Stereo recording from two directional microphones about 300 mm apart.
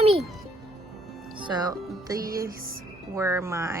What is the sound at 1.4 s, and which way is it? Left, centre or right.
A child's voice, centre.